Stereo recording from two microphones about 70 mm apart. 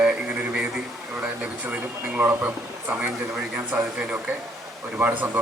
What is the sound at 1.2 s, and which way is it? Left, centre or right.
Speech, right.